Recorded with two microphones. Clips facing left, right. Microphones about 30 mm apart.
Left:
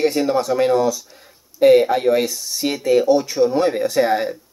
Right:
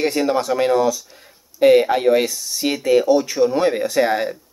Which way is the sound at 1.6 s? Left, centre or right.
Centre.